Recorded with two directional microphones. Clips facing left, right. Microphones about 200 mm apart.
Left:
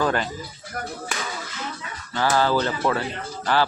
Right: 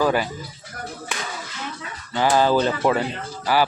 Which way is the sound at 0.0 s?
10° right (ahead or behind).